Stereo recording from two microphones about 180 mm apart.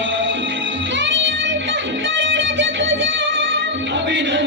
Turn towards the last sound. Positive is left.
turn(degrees=-90)